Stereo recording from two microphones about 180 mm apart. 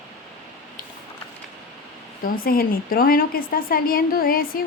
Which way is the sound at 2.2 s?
55° left (ahead or behind).